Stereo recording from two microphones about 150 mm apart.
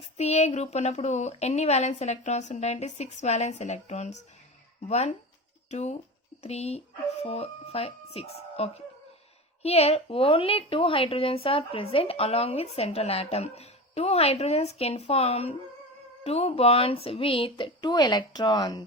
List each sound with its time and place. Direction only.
0.2 s a woman's voice: 45° left (ahead or behind); by 18.9 s 30° left (ahead or behind)